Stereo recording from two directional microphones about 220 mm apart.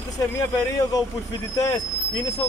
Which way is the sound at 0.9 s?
15° left (ahead or behind).